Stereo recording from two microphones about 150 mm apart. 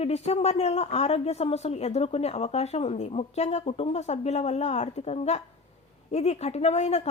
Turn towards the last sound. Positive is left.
turn(degrees=45)  # may be behind; listen again after turning